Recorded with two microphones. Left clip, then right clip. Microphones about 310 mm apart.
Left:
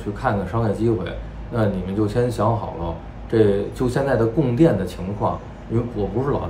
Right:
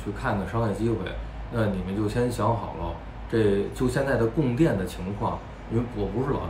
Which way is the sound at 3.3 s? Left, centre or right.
Centre.